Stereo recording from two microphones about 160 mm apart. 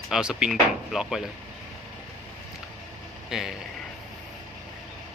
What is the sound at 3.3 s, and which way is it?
Speech, centre (ahead or behind).